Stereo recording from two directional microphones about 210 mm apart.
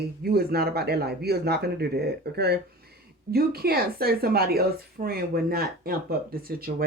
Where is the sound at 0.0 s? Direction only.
45° right (ahead or behind).